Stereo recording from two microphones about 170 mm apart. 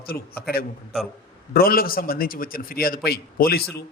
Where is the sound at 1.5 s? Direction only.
60° left (ahead or behind).